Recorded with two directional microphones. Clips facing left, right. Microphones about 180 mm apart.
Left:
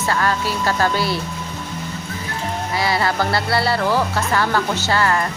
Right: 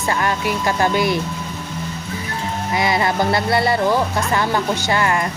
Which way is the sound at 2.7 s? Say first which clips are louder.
Right 2 dB; 20° right (ahead or behind).